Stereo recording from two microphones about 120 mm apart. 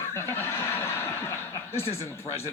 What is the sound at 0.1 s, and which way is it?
Snicker, 20° left (ahead or behind).